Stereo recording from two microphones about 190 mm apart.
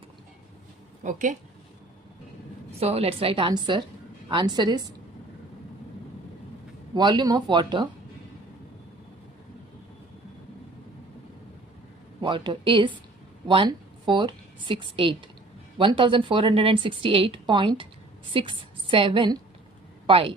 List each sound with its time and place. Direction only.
1.0 s a woman's voice: 40° right (ahead or behind)
2.8 s speech: 30° right (ahead or behind)
6.9 s speech: 20° right (ahead or behind)
12.2 s a woman's voice: 25° right (ahead or behind)